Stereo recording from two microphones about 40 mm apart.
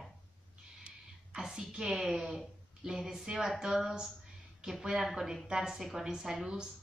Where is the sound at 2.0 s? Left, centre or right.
Centre.